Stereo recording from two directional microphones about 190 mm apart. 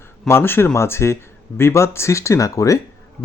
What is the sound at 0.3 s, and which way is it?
A man's voice, 10° left (ahead or behind).